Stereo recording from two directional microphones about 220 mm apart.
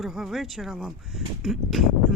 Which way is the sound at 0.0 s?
Centre (ahead or behind).